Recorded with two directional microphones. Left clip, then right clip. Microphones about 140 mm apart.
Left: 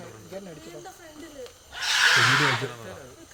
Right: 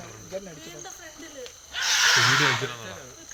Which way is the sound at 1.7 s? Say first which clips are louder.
Right 3 dB; centre (ahead or behind).